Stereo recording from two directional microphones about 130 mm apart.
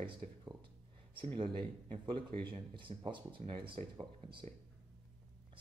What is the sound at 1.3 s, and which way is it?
Speech, 40° right (ahead or behind).